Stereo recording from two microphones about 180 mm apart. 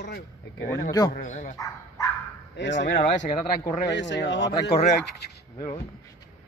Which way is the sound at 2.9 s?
45° left (ahead or behind).